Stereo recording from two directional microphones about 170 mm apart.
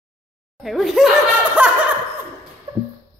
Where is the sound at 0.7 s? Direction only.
Centre (ahead or behind).